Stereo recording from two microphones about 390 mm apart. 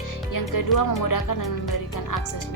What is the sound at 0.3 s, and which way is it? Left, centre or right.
Music, left.